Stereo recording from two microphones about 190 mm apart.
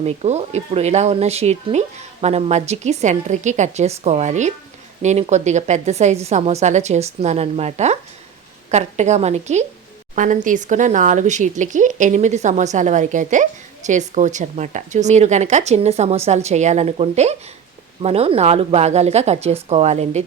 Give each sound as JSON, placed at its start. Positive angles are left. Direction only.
{"t": 0.0, "sound": "speech", "side_deg": -35}